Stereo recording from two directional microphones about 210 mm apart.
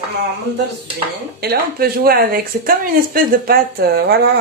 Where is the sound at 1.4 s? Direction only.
45° right (ahead or behind).